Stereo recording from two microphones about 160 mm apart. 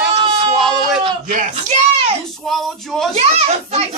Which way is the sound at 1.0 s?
50° right (ahead or behind).